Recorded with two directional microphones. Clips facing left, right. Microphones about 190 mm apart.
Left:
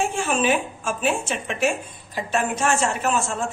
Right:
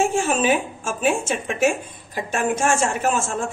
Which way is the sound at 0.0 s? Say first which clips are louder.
Right 3 dB; 45° right (ahead or behind).